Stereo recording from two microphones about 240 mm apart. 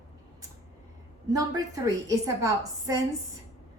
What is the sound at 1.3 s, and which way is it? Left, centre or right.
A woman's voice, centre.